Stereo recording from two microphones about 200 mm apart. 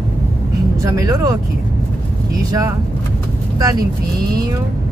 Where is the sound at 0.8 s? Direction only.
15° right (ahead or behind).